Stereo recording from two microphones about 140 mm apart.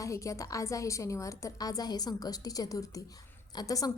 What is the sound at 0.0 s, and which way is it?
A woman's voice, 20° left (ahead or behind).